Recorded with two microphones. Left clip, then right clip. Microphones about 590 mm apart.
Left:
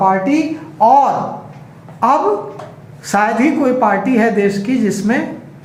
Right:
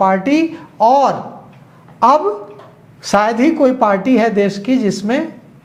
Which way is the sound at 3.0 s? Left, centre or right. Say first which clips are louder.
Right 1 dB; right.